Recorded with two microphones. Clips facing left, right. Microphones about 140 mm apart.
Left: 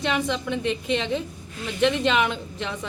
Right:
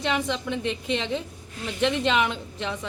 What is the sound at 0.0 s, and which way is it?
A woman's voice, 25° right (ahead or behind).